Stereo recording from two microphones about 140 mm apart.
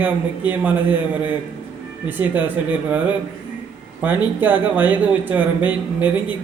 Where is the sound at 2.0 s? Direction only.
15° right (ahead or behind).